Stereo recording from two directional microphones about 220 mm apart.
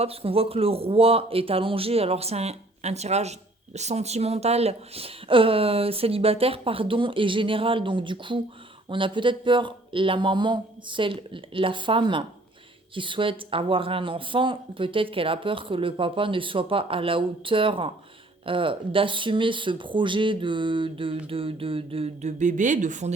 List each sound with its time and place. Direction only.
0.0 s speech: 25° right (ahead or behind)